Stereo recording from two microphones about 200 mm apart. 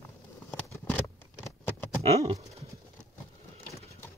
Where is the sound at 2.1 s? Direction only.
30° right (ahead or behind).